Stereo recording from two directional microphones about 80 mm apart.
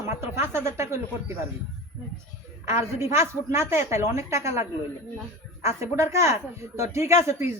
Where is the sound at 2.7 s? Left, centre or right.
Right.